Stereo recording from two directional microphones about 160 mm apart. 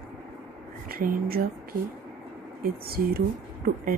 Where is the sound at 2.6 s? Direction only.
70° right (ahead or behind).